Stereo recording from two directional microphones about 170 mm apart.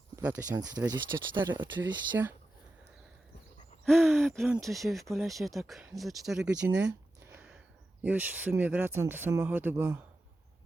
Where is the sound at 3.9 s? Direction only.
Centre (ahead or behind).